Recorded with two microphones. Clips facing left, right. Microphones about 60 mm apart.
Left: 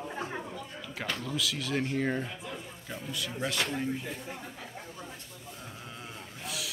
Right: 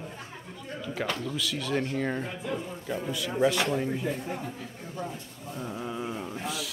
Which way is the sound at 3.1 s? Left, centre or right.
Centre.